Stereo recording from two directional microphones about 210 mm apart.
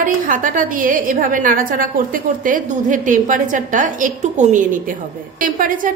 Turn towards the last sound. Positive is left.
turn(degrees=-40)  # may be behind; listen again after turning